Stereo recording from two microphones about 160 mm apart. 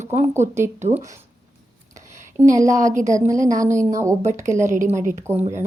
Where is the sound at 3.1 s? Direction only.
20° right (ahead or behind).